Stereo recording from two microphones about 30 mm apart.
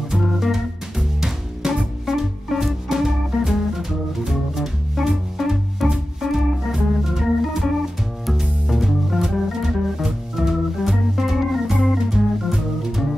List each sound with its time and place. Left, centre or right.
0.1 s music: centre
1.6 s music: right
2.0 s music: centre
6.2 s organ: centre
8.3 s music: centre
10.0 s organ: centre
11.9 s music: centre